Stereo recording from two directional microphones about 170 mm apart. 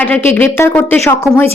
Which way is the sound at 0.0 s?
10° left (ahead or behind).